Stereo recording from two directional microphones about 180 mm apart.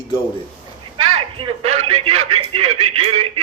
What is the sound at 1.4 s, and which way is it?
Speech, 35° right (ahead or behind).